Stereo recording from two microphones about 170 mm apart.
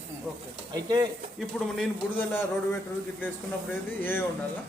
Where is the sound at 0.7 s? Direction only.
20° right (ahead or behind).